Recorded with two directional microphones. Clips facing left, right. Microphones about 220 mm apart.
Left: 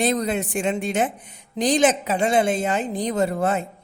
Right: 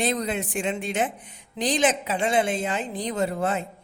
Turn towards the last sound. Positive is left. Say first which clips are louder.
# left 4 dB
turn(degrees=45)  # may be behind; listen again after turning